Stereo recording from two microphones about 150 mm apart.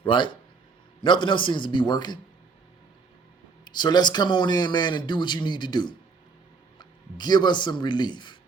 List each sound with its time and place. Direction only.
0.0 s a man's voice: 30° left (ahead or behind)
3.6 s speech: 30° left (ahead or behind)